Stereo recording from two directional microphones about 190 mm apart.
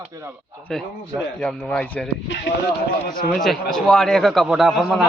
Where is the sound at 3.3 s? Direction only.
Centre (ahead or behind).